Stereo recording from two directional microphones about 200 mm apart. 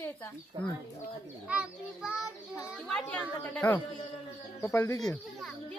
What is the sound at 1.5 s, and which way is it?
A child's voice, 5° right (ahead or behind).